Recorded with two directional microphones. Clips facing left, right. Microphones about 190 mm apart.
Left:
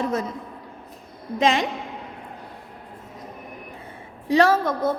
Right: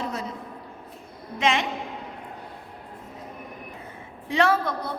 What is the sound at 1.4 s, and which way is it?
Speech, 35° left (ahead or behind).